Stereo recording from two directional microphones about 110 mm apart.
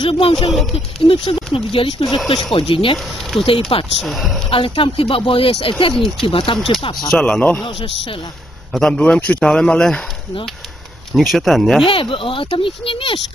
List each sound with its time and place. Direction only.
0.2 s a child's voice: 45° left (ahead or behind)
0.5 s speech: centre (ahead or behind)
1.0 s a child's voice: 50° left (ahead or behind)
4.0 s speech: centre (ahead or behind)
4.5 s speech: 55° left (ahead or behind)
5.9 s speech: 5° left (ahead or behind)
6.2 s a child's voice: 50° left (ahead or behind)
7.1 s a man's voice: 10° left (ahead or behind)
8.7 s a man's voice: 5° left (ahead or behind)
11.1 s speech: centre (ahead or behind)
11.8 s a child's voice: 50° left (ahead or behind)